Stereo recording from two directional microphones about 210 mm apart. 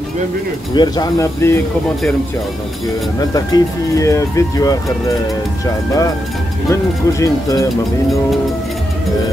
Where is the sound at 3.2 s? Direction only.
15° left (ahead or behind).